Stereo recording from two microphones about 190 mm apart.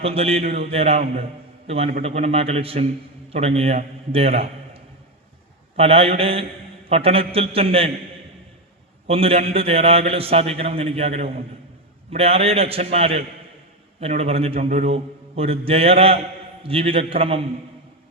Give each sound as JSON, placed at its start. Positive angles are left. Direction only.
{"t": 0.0, "sound": "a man's voice", "side_deg": -30}
{"t": 9.0, "sound": "a man's voice", "side_deg": -30}